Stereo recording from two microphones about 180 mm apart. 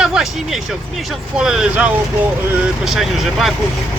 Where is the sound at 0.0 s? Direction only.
5° right (ahead or behind).